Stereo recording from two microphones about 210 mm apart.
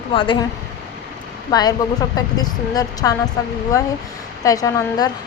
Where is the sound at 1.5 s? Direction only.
20° left (ahead or behind).